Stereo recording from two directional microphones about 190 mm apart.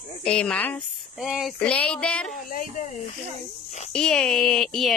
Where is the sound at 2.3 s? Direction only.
45° left (ahead or behind).